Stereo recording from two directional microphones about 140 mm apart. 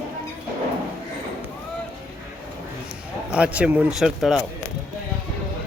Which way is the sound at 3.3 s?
10° right (ahead or behind).